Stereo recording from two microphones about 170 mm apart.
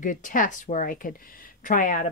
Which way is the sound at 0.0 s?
50° left (ahead or behind).